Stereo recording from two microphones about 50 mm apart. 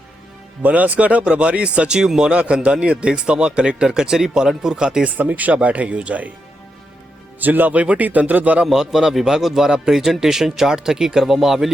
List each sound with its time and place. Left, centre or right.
0.6 s speech: right
2.0 s a man's voice: centre
5.1 s a man's voice: right
7.3 s a man's voice: right
8.6 s a man's voice: centre